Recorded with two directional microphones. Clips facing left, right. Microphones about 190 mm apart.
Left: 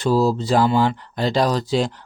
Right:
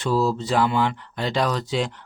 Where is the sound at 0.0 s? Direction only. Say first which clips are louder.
Left 4 dB; 35° left (ahead or behind).